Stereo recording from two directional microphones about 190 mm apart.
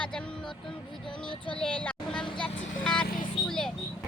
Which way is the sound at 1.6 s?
5° left (ahead or behind).